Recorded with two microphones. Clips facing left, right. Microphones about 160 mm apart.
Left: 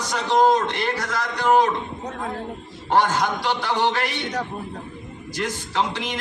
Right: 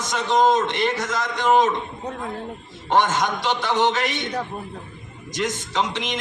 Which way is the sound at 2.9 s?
20° right (ahead or behind).